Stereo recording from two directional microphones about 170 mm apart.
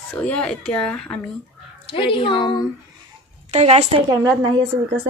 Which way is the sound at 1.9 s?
30° left (ahead or behind).